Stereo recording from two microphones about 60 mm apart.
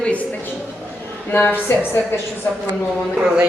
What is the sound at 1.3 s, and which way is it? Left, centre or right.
Speech, left.